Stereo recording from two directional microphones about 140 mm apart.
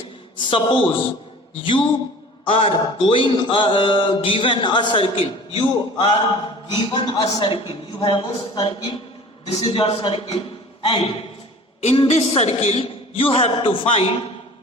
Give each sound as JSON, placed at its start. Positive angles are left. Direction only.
{"t": 0.5, "sound": "mantra", "side_deg": 40}
{"t": 5.5, "sound": "a man's voice", "side_deg": 45}
{"t": 6.7, "sound": "mantra", "side_deg": 40}
{"t": 11.8, "sound": "a man's voice", "side_deg": 50}